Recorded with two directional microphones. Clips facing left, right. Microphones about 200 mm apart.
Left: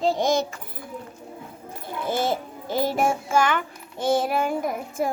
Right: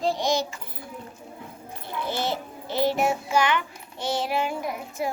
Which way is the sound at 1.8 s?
50° left (ahead or behind).